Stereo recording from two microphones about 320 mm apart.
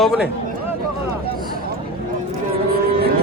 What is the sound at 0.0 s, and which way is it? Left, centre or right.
Speech, centre.